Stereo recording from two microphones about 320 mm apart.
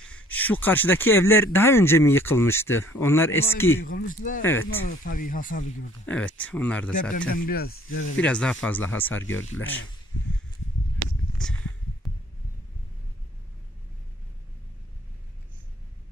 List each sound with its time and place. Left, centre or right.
0.1 s speech: centre
3.8 s speech: left
6.0 s speech: centre
6.9 s speech: left
8.2 s speech: centre
11.4 s speech: centre